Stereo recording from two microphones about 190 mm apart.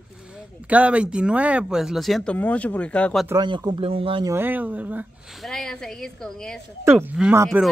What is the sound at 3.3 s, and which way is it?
Speech, 20° right (ahead or behind).